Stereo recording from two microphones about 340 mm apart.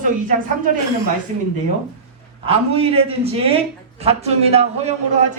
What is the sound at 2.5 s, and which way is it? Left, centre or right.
A man's voice, centre.